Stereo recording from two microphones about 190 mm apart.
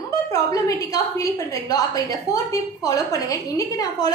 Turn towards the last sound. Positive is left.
turn(degrees=20)  # may be behind; listen again after turning